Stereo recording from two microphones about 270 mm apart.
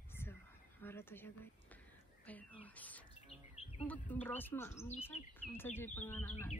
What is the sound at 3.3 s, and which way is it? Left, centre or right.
Bird, left.